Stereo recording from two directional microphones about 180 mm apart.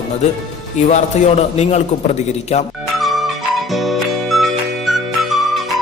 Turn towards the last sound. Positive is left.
turn(degrees=0)  # may be behind; listen again after turning